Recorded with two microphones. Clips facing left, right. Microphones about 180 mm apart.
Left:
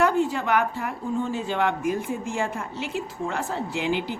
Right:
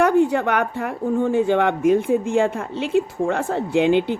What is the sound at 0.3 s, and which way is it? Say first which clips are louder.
Speech: right 3 dB; 65° right (ahead or behind).